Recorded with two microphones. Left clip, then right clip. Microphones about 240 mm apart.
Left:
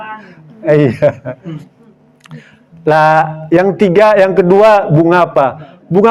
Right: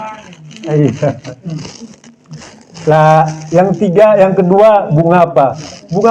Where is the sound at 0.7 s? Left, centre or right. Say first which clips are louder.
Left 4 dB; left.